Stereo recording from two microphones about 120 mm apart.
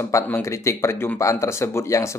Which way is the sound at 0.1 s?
25° left (ahead or behind).